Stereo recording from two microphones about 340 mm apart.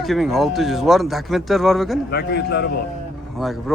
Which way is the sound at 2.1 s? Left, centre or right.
Left.